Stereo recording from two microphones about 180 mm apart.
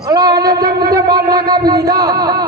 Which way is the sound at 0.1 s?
20° right (ahead or behind).